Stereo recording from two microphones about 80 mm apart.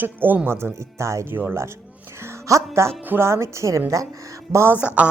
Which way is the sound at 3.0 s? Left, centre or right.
Right.